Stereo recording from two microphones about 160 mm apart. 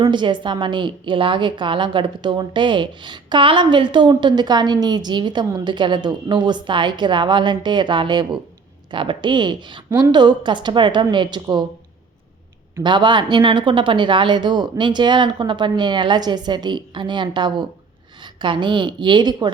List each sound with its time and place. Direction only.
0.0 s a woman's voice: 30° right (ahead or behind)
12.8 s a woman's voice: 30° right (ahead or behind)